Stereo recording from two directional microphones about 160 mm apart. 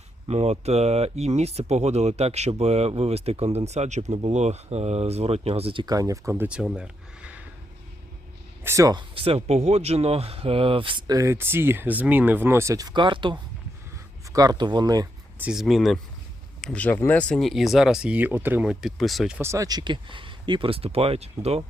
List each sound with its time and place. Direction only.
0.3 s speech: 40° right (ahead or behind)
5.8 s speech: 20° right (ahead or behind)
8.6 s speech: 20° right (ahead or behind)
15.4 s speech: 5° right (ahead or behind)
19.4 s speech: 20° right (ahead or behind); by 21.6 s 40° right (ahead or behind)